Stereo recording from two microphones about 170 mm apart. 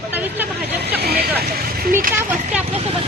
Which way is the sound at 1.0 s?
70° right (ahead or behind).